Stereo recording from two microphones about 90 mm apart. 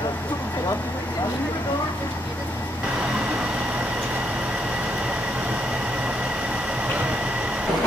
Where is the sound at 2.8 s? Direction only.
10° right (ahead or behind).